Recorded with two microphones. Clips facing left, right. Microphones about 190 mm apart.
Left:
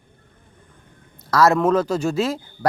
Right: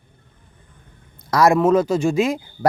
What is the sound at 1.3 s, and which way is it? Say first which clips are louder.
A man's voice: right 2 dB; 15° right (ahead or behind).